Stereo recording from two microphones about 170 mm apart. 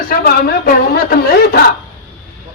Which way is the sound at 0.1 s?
60° left (ahead or behind).